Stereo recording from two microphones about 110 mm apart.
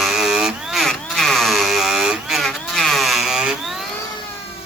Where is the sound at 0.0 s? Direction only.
Centre (ahead or behind).